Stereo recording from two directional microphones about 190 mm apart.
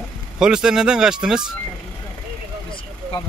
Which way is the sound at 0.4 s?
5° right (ahead or behind).